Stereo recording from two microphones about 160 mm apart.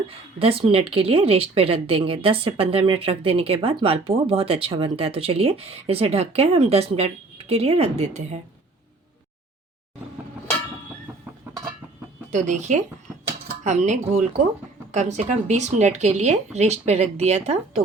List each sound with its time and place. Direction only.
0.3 s speech: 35° right (ahead or behind)
11.5 s a sound: 15° right (ahead or behind)
12.3 s speech: 50° right (ahead or behind)